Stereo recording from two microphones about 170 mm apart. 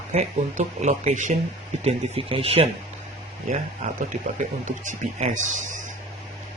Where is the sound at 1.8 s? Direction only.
35° right (ahead or behind).